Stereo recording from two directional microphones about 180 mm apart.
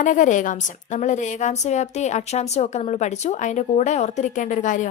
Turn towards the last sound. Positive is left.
turn(degrees=45)  # may be behind; listen again after turning